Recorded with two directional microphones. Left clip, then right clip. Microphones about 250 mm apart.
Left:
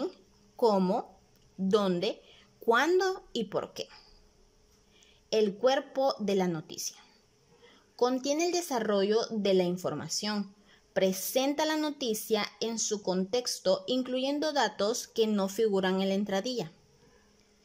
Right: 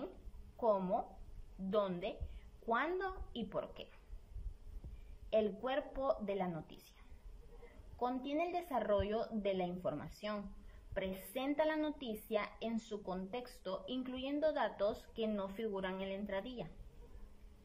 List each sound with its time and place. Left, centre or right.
0.6 s speech: left
5.3 s speech: left
8.0 s speech: left